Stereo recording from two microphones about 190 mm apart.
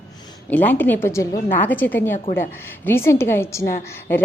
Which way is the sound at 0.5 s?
10° left (ahead or behind).